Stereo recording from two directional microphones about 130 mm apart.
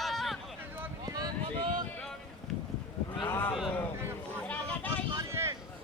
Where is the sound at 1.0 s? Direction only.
30° right (ahead or behind).